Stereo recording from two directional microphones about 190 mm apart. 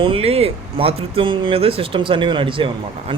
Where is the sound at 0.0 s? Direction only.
30° right (ahead or behind).